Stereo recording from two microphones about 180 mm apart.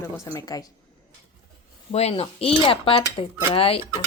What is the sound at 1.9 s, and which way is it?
Speech, 35° left (ahead or behind).